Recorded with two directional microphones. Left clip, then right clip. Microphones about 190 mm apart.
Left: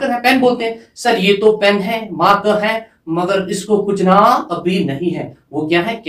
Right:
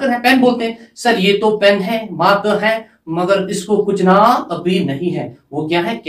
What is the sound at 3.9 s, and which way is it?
Speech, 15° left (ahead or behind).